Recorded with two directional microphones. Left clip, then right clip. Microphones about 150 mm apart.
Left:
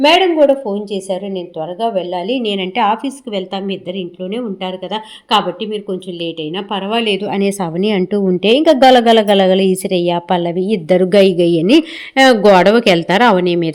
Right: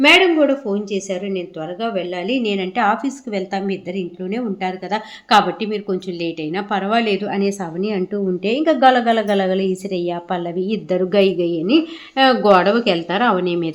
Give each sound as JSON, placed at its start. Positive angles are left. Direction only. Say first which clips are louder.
{"t": 0.0, "sound": "a woman's voice", "louder": "left 2 dB", "side_deg": 15}
{"t": 5.3, "sound": "a woman's voice", "louder": "even", "side_deg": -5}
{"t": 6.7, "sound": "a woman's voice", "louder": "left 1 dB", "side_deg": 10}
{"t": 7.3, "sound": "a woman's voice", "louder": "left 4 dB", "side_deg": 40}
{"t": 11.4, "sound": "a woman's voice", "louder": "left 6 dB", "side_deg": 45}